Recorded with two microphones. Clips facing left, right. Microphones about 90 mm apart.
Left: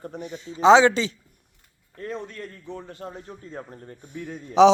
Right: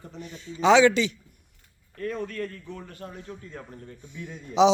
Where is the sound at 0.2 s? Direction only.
20° left (ahead or behind).